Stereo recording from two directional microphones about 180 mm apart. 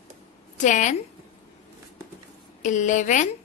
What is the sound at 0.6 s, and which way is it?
Speech, 45° left (ahead or behind).